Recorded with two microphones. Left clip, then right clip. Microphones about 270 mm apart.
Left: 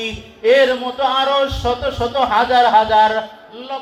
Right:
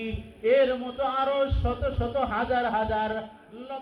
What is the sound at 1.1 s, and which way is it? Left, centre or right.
Music, centre.